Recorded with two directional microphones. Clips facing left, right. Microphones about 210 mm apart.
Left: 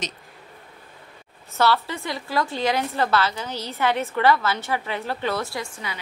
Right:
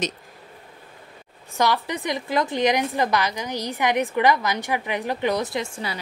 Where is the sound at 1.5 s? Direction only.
15° right (ahead or behind).